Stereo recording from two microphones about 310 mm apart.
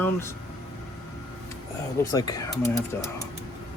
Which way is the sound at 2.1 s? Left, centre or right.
Centre.